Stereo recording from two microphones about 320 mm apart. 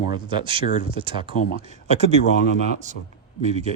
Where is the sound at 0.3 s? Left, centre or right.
Centre.